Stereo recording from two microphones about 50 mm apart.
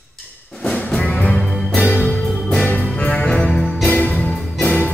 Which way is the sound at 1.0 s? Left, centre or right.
Left.